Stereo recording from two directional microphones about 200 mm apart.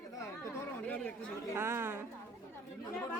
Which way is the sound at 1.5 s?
10° right (ahead or behind).